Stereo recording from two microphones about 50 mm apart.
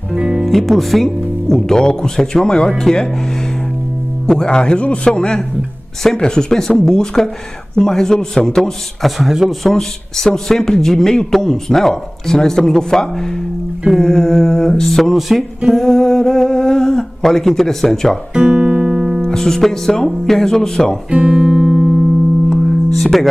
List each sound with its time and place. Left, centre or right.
0.1 s music: centre
0.5 s a man's voice: centre
4.3 s a man's voice: centre
9.2 s speech: centre
9.5 s a man's voice: centre
13.9 s a sound: centre
14.7 s music: centre
18.3 s music: centre
19.2 s a man's voice: centre
21.3 s music: centre
22.5 s music: centre